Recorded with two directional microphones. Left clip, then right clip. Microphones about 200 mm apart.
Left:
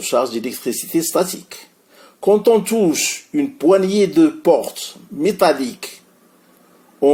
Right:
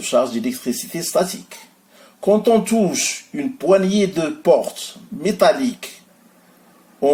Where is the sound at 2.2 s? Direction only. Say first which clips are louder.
Left 2 dB; 35° left (ahead or behind).